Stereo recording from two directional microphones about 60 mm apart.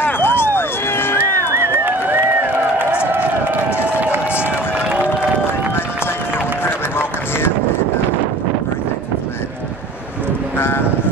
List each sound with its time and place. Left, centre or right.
0.0 s run: left
1.6 s a sound: right
4.0 s run: right
6.6 s run: left